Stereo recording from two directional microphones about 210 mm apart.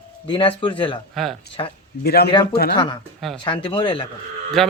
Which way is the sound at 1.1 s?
Centre (ahead or behind).